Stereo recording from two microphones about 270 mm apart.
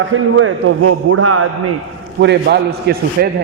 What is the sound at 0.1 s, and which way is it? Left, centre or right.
A man's voice, right.